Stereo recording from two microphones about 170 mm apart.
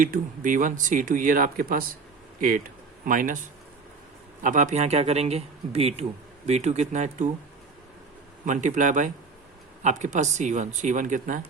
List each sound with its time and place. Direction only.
0.0 s speech: 50° right (ahead or behind)
3.1 s speech: 50° right (ahead or behind)
4.4 s speech: 45° right (ahead or behind)
8.4 s speech: 45° right (ahead or behind)